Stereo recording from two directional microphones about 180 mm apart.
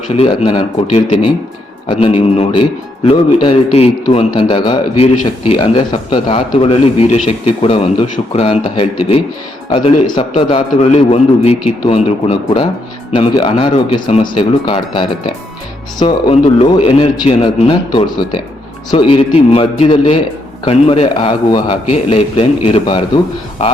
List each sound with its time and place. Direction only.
0.1 s a man's voice: 30° left (ahead or behind)
1.9 s a man's voice: 30° left (ahead or behind)